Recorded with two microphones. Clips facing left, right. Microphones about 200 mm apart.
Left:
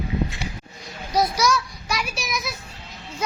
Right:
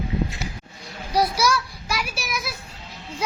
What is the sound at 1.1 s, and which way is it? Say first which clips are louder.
A child's voice: even; 10° right (ahead or behind).